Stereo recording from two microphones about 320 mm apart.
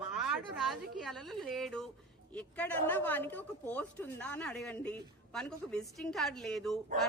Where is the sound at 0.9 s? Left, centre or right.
Centre.